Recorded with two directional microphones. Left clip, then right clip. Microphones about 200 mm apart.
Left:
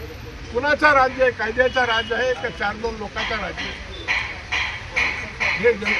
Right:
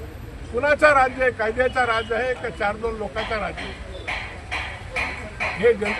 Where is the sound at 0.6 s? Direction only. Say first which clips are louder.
Even; 25° right (ahead or behind).